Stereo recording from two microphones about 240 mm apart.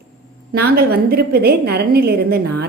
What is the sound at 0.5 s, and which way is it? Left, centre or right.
A woman's voice, right.